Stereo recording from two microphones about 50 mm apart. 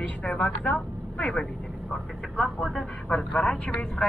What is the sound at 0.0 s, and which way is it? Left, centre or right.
Speech, left.